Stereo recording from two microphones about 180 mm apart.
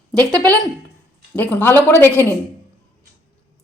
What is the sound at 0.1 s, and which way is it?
Speech, 20° right (ahead or behind).